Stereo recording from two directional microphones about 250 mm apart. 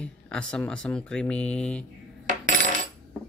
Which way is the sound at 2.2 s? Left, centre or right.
Right.